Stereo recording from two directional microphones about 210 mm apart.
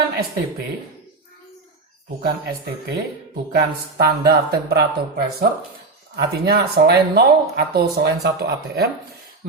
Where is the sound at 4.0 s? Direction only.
50° right (ahead or behind).